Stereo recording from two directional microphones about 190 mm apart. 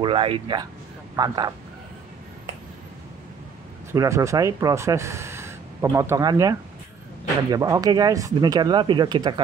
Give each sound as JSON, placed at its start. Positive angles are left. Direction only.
{"t": 0.0, "sound": "speech", "side_deg": -30}
{"t": 3.9, "sound": "speech", "side_deg": -15}
{"t": 7.5, "sound": "speech", "side_deg": -20}